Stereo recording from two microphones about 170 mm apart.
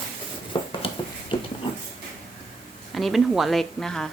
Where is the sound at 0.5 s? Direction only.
30° left (ahead or behind).